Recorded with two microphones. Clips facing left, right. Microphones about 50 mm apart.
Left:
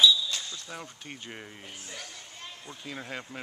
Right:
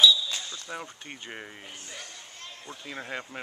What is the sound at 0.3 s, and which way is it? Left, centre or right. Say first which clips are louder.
Speech: right 1 dB; centre.